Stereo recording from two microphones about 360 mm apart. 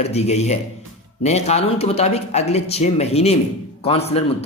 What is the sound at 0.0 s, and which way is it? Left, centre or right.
A man's voice, centre.